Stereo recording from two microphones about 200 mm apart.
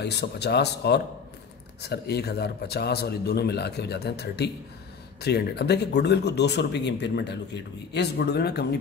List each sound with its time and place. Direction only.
0.0 s a man's voice: 55° left (ahead or behind)